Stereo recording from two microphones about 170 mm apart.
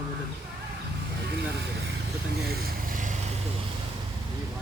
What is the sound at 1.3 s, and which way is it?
Speech, 80° right.